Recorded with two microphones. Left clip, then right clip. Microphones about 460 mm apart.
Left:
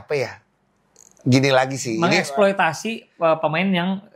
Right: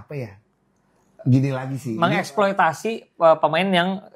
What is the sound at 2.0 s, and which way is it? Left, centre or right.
Speech, right.